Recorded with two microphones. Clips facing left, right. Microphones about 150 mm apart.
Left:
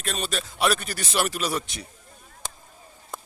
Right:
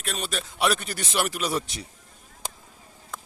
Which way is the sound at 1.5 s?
35° right (ahead or behind).